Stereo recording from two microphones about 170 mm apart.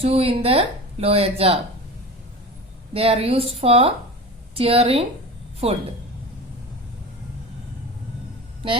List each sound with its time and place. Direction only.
0.0 s speech: 35° right (ahead or behind)
2.9 s speech: 35° right (ahead or behind)